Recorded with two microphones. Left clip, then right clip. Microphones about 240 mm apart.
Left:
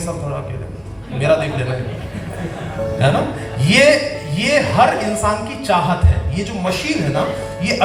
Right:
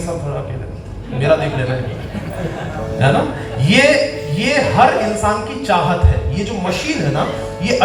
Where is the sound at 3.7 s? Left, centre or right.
Left.